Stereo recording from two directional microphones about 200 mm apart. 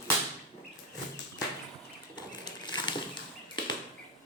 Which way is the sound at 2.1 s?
20° left (ahead or behind).